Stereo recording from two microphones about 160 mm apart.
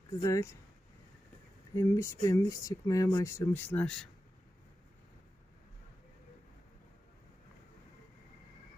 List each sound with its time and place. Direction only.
0.2 s speech: 20° left (ahead or behind)
1.7 s speech: 20° left (ahead or behind)